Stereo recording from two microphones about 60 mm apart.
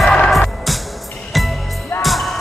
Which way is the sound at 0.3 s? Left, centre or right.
Centre.